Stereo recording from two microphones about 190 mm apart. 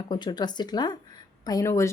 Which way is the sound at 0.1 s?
20° left (ahead or behind).